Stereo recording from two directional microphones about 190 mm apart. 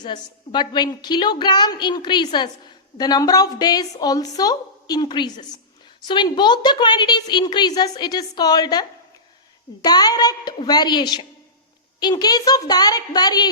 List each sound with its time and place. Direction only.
0.0 s a woman's voice: 25° left (ahead or behind)